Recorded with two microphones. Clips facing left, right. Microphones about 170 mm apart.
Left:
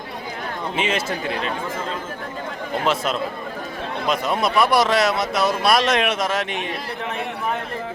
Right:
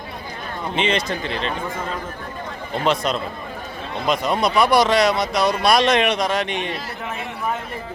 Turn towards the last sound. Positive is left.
turn(degrees=0)  # may be behind; listen again after turning